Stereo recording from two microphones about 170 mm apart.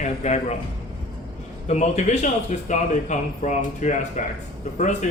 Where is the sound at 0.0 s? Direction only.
45° left (ahead or behind).